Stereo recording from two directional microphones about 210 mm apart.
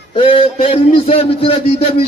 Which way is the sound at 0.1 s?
25° left (ahead or behind).